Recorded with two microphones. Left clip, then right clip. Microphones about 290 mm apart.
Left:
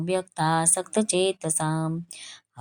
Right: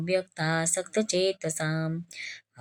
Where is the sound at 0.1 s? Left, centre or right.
Left.